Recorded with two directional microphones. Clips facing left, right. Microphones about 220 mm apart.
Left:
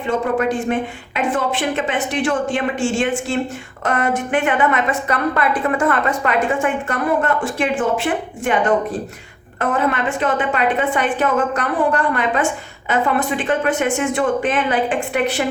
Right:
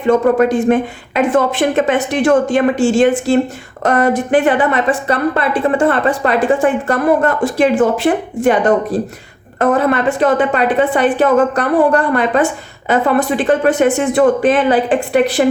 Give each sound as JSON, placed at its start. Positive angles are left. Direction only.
{"t": 0.3, "sound": "a woman's voice", "side_deg": -40}
{"t": 12.9, "sound": "a woman's voice", "side_deg": -35}